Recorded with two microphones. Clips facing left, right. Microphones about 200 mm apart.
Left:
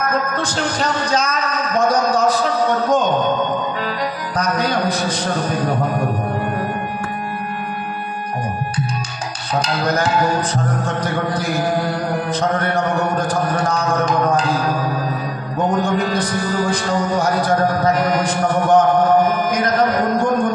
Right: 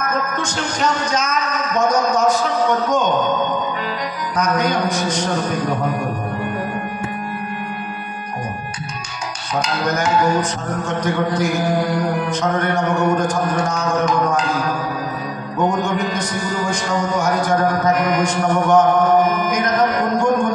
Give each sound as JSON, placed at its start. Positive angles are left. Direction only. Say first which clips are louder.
{"t": 0.1, "sound": "a man's voice", "louder": "left 2 dB", "side_deg": 35}
{"t": 4.4, "sound": "a man's voice", "louder": "right 1 dB", "side_deg": 35}
{"t": 9.8, "sound": "a man's voice", "louder": "right 1 dB", "side_deg": 35}
{"t": 15.7, "sound": "a man's voice", "louder": "left 2 dB", "side_deg": 35}